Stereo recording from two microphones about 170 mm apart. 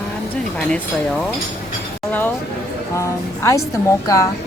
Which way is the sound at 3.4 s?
20° left (ahead or behind).